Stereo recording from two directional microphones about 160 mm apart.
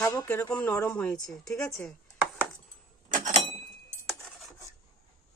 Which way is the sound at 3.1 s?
50° right (ahead or behind).